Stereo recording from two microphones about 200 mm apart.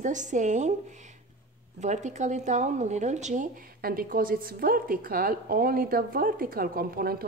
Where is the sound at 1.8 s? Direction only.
35° right (ahead or behind).